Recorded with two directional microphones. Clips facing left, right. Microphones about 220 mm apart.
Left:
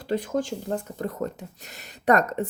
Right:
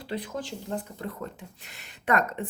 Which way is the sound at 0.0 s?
45° left (ahead or behind).